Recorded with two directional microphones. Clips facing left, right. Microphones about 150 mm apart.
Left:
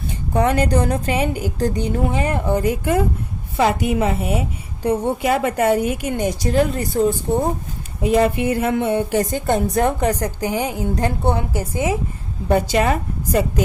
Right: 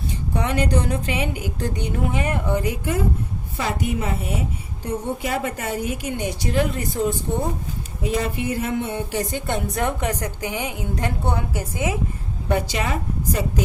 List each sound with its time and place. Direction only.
0.3 s a woman's voice: 45° left (ahead or behind)
2.6 s a woman's voice: 55° left (ahead or behind)
3.6 s a woman's voice: 85° left
4.8 s a woman's voice: 70° left (ahead or behind); by 7.0 s 35° left (ahead or behind)
8.0 s a woman's voice: 60° left (ahead or behind)
9.3 s a woman's voice: 40° left (ahead or behind)
12.5 s a woman's voice: 45° left (ahead or behind)